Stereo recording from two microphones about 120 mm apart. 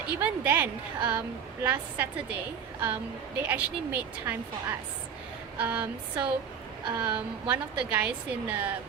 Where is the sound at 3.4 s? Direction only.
15° right (ahead or behind).